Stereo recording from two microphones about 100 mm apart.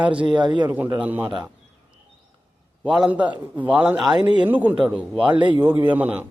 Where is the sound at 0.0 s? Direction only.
10° right (ahead or behind).